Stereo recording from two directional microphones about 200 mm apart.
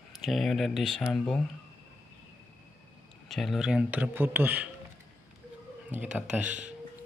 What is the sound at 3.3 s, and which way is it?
Speech, centre (ahead or behind).